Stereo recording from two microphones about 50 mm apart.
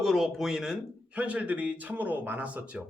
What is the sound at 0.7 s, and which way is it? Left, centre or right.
Speech, right.